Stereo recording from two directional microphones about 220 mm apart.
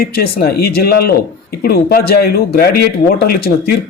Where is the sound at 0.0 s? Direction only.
45° left (ahead or behind).